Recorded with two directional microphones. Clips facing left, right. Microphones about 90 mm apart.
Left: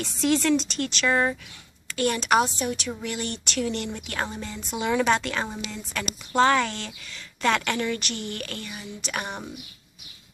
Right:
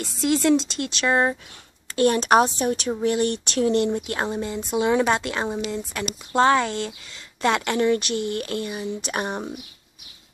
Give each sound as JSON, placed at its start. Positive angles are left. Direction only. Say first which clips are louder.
{"t": 0.2, "sound": "speech", "louder": "right 3 dB", "side_deg": -10}
{"t": 1.9, "sound": "a woman's voice", "louder": "right 5 dB", "side_deg": -40}